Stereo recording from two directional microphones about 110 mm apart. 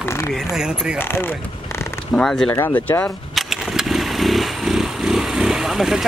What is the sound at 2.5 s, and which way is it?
Speech, 20° left (ahead or behind).